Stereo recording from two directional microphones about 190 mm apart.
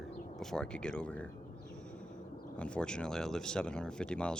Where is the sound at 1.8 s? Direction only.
5° left (ahead or behind).